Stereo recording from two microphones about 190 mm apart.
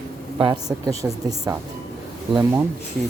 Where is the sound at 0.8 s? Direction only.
20° right (ahead or behind).